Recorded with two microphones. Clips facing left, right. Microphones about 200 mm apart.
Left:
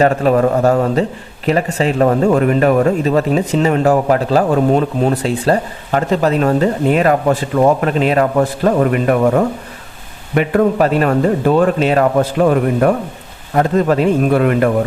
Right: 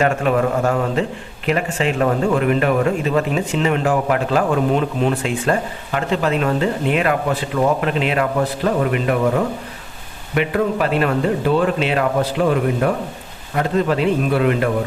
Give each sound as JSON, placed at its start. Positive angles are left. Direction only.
{"t": 0.0, "sound": "a man's voice", "side_deg": 35}
{"t": 10.3, "sound": "speech", "side_deg": 45}
{"t": 13.6, "sound": "speech", "side_deg": 45}